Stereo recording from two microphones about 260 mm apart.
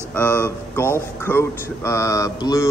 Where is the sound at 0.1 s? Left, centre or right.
Centre.